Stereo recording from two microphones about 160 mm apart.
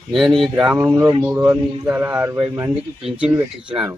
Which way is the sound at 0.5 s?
10° right (ahead or behind).